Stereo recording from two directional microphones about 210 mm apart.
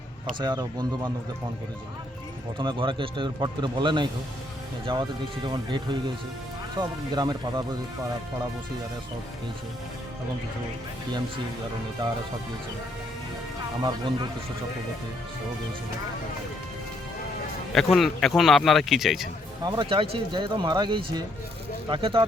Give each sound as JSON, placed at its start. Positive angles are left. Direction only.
{"t": 0.3, "sound": "speech", "side_deg": -20}
{"t": 2.6, "sound": "speech", "side_deg": -25}
{"t": 13.8, "sound": "speech", "side_deg": -20}
{"t": 17.7, "sound": "a man's voice", "side_deg": 0}
{"t": 19.6, "sound": "speech", "side_deg": -20}